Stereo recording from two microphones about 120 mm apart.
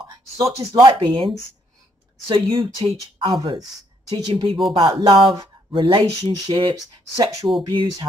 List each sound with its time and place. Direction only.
0.0 s speech: 30° right (ahead or behind)
0.9 s speech: 45° right (ahead or behind)
3.3 s speech: 30° right (ahead or behind)
4.3 s speech: 50° right (ahead or behind)
7.2 s speech: 30° right (ahead or behind)